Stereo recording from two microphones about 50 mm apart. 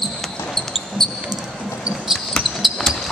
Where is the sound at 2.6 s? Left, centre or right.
Centre.